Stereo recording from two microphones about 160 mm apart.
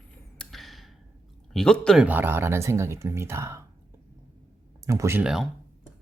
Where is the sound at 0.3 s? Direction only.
Centre (ahead or behind).